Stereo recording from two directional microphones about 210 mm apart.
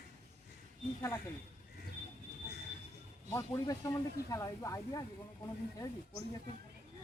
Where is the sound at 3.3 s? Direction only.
15° left (ahead or behind).